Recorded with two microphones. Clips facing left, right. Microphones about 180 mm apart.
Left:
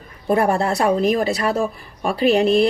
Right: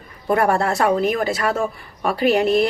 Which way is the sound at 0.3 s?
25° left (ahead or behind).